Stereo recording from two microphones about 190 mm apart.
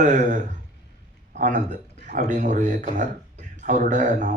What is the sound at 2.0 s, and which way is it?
A man's voice, 45° right (ahead or behind).